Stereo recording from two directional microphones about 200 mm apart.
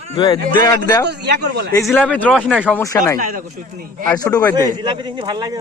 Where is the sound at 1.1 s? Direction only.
55° right (ahead or behind).